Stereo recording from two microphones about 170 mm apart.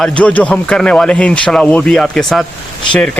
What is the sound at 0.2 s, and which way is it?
Speech, 5° left (ahead or behind).